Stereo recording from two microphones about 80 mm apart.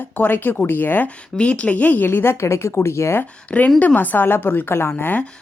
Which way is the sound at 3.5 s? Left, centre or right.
Left.